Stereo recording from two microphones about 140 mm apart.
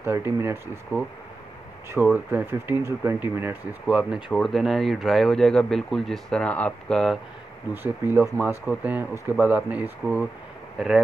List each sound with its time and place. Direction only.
0.0 s speech: 15° right (ahead or behind)
2.1 s speech: 15° right (ahead or behind)
4.3 s speech: centre (ahead or behind)
7.7 s speech: 15° right (ahead or behind)